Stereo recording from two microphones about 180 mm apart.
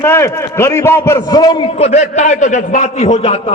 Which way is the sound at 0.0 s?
15° left (ahead or behind).